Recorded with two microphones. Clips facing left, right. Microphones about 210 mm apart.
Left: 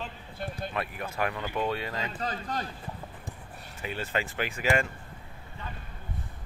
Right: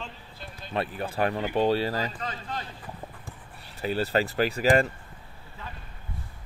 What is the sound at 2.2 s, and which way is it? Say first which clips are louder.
Speech: left 2 dB; 40° left (ahead or behind).